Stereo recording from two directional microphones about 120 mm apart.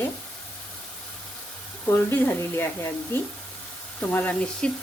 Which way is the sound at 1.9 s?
20° left (ahead or behind).